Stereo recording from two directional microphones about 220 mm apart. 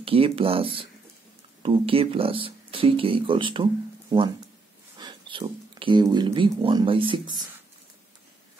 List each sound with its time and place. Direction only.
0.0 s speech: 25° right (ahead or behind)
4.9 s speech: 20° right (ahead or behind)